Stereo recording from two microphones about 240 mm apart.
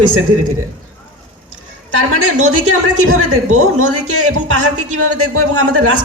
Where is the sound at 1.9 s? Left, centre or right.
Right.